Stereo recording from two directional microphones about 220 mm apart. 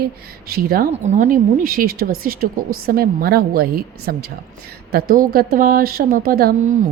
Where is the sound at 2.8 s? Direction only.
40° right (ahead or behind).